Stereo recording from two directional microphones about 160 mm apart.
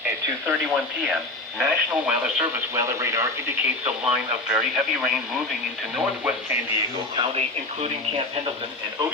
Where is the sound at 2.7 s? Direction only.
20° right (ahead or behind).